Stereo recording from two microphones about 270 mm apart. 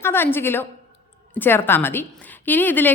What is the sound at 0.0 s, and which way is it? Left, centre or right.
A woman's voice, centre.